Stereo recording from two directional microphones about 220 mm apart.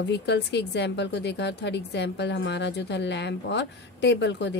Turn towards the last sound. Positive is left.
turn(degrees=55)  # may be behind; listen again after turning